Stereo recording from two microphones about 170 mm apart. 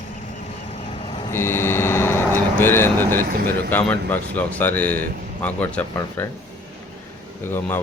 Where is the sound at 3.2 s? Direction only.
60° right (ahead or behind).